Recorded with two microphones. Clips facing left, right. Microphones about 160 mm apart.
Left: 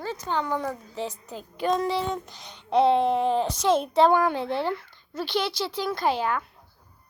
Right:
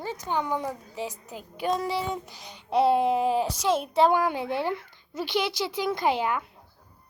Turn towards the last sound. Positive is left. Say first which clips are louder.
# even
turn(degrees=-20)  # may be behind; listen again after turning